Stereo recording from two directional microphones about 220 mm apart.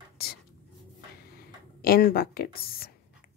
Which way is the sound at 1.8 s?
40° left (ahead or behind).